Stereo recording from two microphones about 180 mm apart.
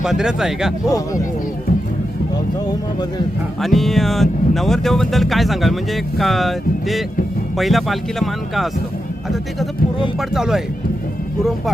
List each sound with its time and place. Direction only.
0.0 s speech: 5° right (ahead or behind)
0.9 s speech: 20° left (ahead or behind)
3.6 s speech: centre (ahead or behind)
10.2 s speech: centre (ahead or behind)